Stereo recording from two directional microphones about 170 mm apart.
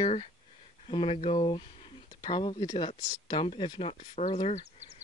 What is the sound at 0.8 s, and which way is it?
Speech, 35° left (ahead or behind).